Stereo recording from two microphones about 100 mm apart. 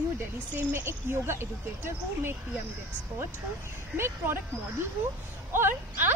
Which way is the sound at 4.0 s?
20° right (ahead or behind).